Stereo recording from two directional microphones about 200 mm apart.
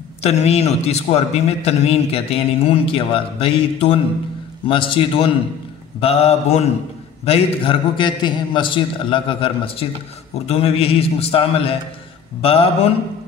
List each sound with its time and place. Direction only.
0.2 s a man's voice: 30° left (ahead or behind)